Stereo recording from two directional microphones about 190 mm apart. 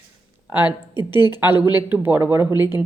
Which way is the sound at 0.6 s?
25° left (ahead or behind).